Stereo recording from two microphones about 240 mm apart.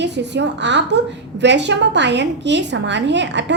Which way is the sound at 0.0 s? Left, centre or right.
Right.